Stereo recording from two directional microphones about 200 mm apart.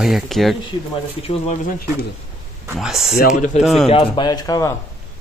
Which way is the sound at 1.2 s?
30° left (ahead or behind).